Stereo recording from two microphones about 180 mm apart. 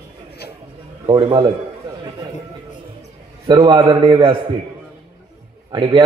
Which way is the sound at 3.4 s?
25° right (ahead or behind).